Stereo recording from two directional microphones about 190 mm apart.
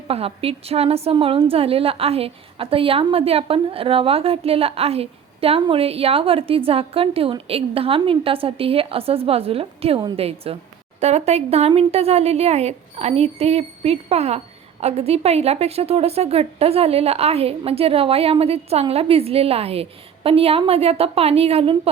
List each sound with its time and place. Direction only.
0.1 s a woman's voice: 30° right (ahead or behind)